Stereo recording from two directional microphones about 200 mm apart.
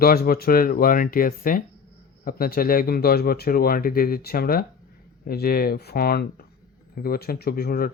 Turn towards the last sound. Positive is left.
turn(degrees=50)  # may be behind; listen again after turning